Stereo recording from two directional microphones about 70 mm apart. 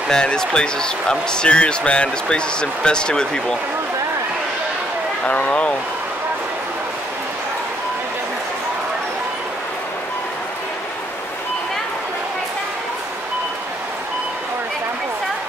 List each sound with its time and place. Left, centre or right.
0.1 s speech: centre
5.2 s speech: centre